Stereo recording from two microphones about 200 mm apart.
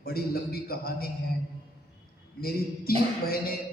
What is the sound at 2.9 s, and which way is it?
Speech, 50° left (ahead or behind).